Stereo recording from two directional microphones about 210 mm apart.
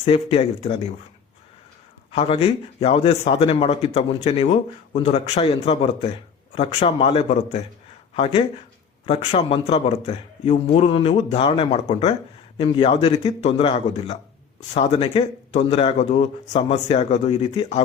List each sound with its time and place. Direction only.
0.0 s speech: 30° left (ahead or behind)
2.1 s speech: 25° left (ahead or behind)